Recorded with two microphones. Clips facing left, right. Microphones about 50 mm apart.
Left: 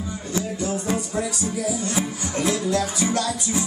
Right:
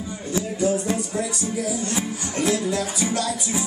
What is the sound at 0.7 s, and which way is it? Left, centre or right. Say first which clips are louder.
Music: right 2 dB; centre.